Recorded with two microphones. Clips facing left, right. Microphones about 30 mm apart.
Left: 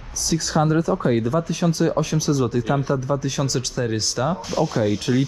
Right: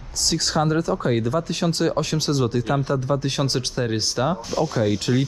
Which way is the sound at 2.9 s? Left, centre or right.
Right.